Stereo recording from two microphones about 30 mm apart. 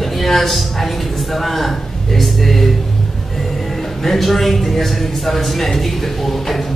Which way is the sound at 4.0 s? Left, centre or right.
Centre.